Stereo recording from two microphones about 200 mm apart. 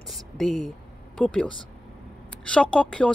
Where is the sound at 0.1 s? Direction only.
Centre (ahead or behind).